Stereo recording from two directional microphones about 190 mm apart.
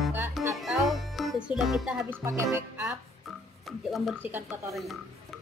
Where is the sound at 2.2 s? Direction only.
15° right (ahead or behind).